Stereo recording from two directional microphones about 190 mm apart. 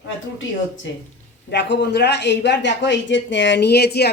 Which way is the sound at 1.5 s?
65° left (ahead or behind).